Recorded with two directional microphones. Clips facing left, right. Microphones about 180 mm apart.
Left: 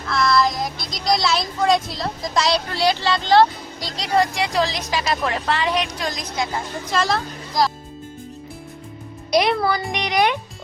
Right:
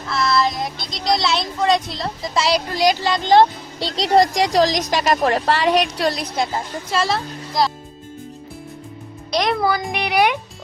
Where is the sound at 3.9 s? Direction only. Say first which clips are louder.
Right 5 dB; 35° right (ahead or behind).